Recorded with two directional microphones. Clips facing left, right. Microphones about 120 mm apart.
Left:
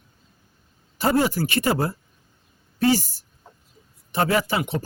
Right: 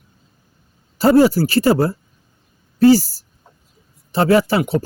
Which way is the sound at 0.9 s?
35° right (ahead or behind).